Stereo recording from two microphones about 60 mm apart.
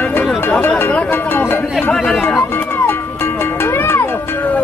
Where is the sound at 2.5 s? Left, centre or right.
Left.